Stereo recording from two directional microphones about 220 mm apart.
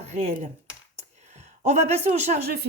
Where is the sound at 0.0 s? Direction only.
30° right (ahead or behind).